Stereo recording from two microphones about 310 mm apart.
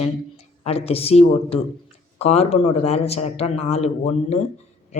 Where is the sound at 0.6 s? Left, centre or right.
Centre.